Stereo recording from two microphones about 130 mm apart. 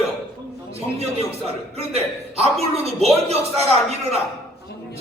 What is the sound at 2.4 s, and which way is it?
Speech, 50° right (ahead or behind).